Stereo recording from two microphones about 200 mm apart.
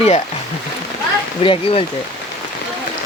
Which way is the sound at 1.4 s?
25° left (ahead or behind).